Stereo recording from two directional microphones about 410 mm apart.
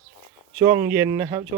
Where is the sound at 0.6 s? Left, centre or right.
Centre.